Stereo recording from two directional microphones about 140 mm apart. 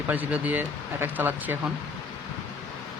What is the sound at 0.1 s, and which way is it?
Speech, 10° right (ahead or behind).